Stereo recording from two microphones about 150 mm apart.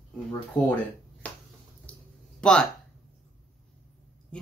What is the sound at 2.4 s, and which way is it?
Speech, 5° left (ahead or behind).